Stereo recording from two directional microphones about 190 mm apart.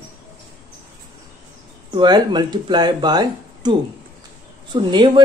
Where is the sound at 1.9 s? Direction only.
20° right (ahead or behind).